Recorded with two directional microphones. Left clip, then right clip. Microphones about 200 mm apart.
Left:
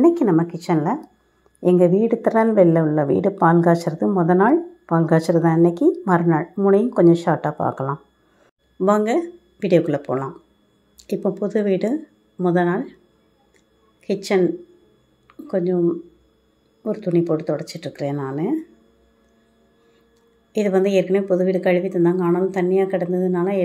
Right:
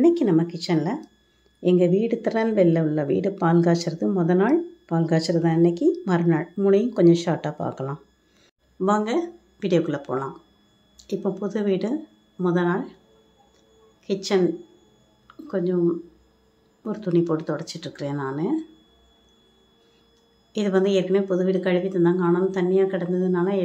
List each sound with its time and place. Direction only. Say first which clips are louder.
0.0 s speech: left 3 dB; 5° left (ahead or behind)
6.3 s speech: left 4 dB; 5° right (ahead or behind)
6.7 s speech: left 3 dB; 5° left (ahead or behind)
8.7 s a woman's voice: left 4 dB; 20° left (ahead or behind)
14.0 s a woman's voice: left 3 dB; 20° left (ahead or behind)
15.2 s a sound: left 4 dB; 15° left (ahead or behind)
16.8 s speech: left 3 dB; 15° left (ahead or behind)
20.5 s speech: left 4 dB; 15° left (ahead or behind)